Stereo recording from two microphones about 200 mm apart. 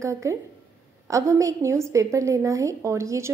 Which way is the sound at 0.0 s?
15° right (ahead or behind).